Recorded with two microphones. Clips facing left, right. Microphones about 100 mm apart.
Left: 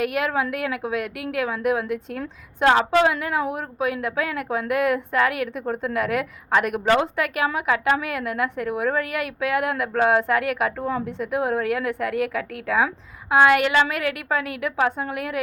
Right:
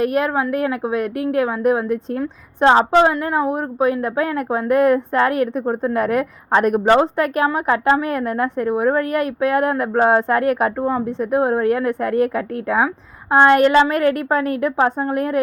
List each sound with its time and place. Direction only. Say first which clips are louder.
0.0 s a woman's voice: right 5 dB; 30° right (ahead or behind)